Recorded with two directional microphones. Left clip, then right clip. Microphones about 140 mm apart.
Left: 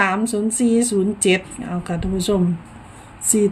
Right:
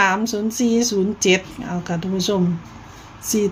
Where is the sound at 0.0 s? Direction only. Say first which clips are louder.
Right 1 dB; 5° left (ahead or behind).